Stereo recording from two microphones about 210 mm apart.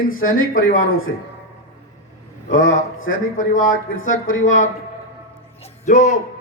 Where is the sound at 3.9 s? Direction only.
70° left (ahead or behind).